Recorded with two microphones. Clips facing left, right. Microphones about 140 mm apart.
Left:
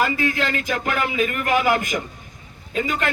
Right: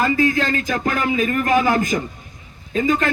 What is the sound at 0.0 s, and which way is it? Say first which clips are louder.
A man's voice: right 4 dB; 35° right (ahead or behind).